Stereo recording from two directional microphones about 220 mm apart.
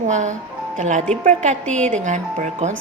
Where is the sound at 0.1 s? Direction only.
35° right (ahead or behind).